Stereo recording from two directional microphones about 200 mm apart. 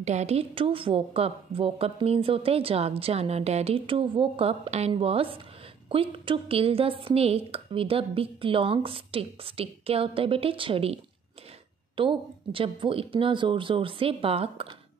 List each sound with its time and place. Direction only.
0.0 s a woman's voice: 35° right (ahead or behind)
12.0 s a woman's voice: 25° right (ahead or behind)